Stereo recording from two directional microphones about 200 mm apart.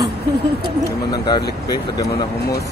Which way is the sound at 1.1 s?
20° left (ahead or behind).